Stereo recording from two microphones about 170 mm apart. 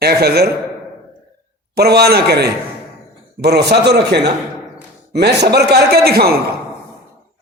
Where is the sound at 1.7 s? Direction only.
70° right (ahead or behind).